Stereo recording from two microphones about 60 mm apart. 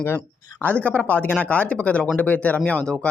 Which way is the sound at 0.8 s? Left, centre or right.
Left.